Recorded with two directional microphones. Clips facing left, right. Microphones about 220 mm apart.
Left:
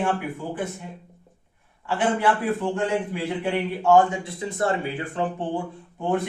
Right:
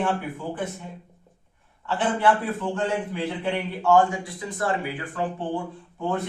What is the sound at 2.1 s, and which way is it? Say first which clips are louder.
Speech: even; 15° left (ahead or behind).